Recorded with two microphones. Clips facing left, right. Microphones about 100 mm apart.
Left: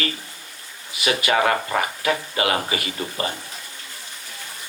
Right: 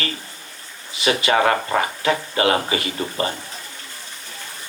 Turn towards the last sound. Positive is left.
turn(degrees=-30)  # may be behind; listen again after turning